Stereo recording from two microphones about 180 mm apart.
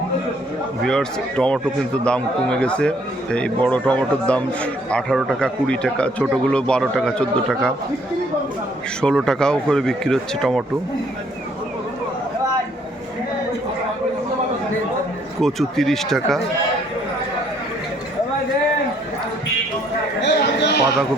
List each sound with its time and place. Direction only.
0.8 s a man's voice: 5° left (ahead or behind)
9.0 s a man's voice: 5° left (ahead or behind)
15.4 s a man's voice: centre (ahead or behind)
20.2 s a sound: 70° left (ahead or behind)